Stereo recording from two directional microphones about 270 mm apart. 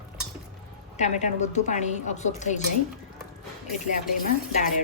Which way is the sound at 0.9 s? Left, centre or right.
Left.